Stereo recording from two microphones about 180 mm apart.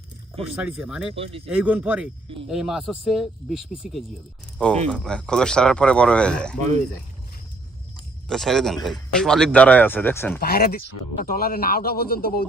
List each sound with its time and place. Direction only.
0.5 s speech: 5° right (ahead or behind)
1.1 s speech: 30° right (ahead or behind)
1.5 s speech: 5° right (ahead or behind)
8.3 s speech: centre (ahead or behind)
10.4 s speech: 60° left (ahead or behind)